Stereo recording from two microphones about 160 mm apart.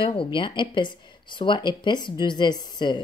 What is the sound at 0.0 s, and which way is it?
Speech, 30° left (ahead or behind).